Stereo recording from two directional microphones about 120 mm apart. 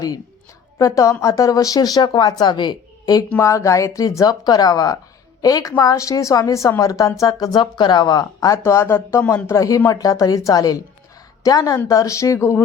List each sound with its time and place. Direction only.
0.8 s a woman's voice: 25° left (ahead or behind)
3.2 s a woman's voice: 25° left (ahead or behind)